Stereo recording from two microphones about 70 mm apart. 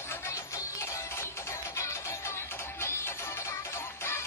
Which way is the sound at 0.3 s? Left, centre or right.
Left.